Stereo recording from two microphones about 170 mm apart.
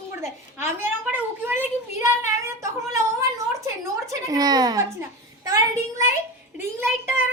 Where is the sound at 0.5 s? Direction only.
15° right (ahead or behind).